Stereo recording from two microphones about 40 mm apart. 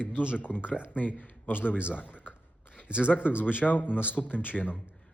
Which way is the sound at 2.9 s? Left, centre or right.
Right.